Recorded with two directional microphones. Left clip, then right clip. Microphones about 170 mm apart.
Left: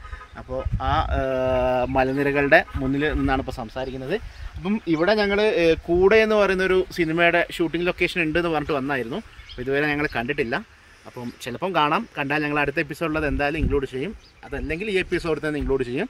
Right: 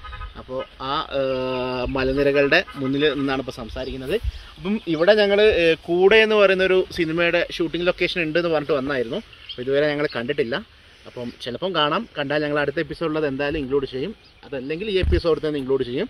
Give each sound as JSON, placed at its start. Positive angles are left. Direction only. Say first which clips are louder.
{"t": 0.7, "sound": "speech", "louder": "left 1 dB", "side_deg": 50}